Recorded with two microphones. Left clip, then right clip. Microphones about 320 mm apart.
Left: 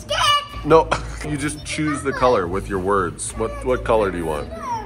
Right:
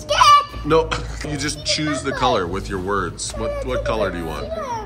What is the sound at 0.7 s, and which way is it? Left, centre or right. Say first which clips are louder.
Speech: left 3 dB; centre.